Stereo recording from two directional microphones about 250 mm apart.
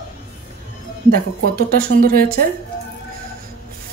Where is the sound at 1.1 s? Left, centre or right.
Right.